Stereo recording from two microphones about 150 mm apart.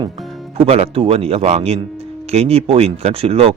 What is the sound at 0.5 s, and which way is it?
Speech, 40° right (ahead or behind).